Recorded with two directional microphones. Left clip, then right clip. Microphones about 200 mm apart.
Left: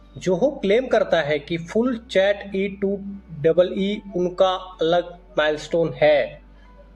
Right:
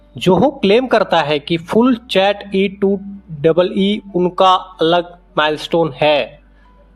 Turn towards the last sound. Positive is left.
turn(degrees=-40)  # may be behind; listen again after turning